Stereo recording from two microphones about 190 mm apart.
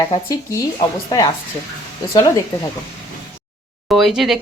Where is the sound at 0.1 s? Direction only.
20° left (ahead or behind).